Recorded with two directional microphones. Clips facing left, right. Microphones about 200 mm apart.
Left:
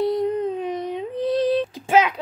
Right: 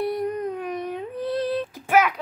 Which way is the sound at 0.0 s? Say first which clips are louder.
Left 4 dB; 25° left (ahead or behind).